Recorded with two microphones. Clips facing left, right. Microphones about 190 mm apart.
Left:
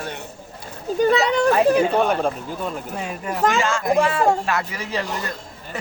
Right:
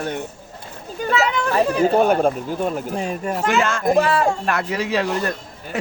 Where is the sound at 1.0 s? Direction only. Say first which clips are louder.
Left 4 dB; 35° left (ahead or behind).